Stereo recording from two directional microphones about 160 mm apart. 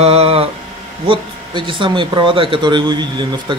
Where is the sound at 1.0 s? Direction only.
30° right (ahead or behind).